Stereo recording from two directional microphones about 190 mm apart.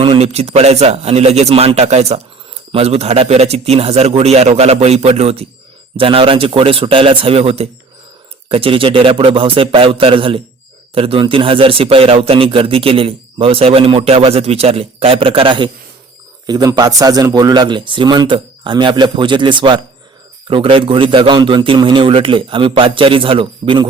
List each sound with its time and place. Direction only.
0.0 s a man's voice: 30° right (ahead or behind)